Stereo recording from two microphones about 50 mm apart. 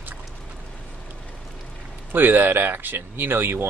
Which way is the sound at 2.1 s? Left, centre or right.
Right.